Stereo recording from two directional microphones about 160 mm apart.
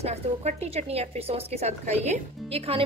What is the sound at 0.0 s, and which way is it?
A woman's voice, 45° right (ahead or behind).